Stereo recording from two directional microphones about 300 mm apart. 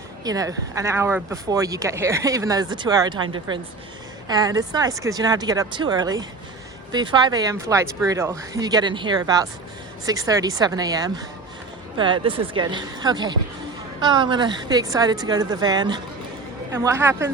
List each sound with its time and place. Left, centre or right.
0.3 s speech: centre